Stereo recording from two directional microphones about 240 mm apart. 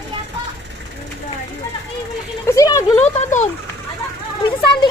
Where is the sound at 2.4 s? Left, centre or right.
Centre.